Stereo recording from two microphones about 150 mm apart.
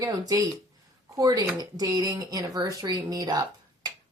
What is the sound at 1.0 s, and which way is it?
Speech, 20° right (ahead or behind).